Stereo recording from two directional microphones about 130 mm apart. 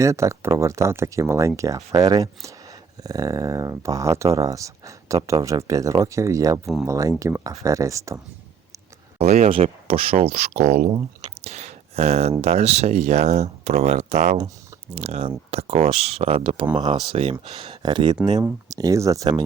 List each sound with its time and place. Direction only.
0.0 s speech: 25° right (ahead or behind)
9.1 s speech: 55° right (ahead or behind)
10.8 s speech: 30° right (ahead or behind)
11.4 s speech: 55° right (ahead or behind); by 17.0 s 35° right (ahead or behind)
17.1 s speech: 45° right (ahead or behind)
18.7 s speech: 25° right (ahead or behind)